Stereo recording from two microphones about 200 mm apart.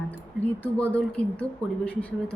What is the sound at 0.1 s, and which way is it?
Speech, 10° left (ahead or behind).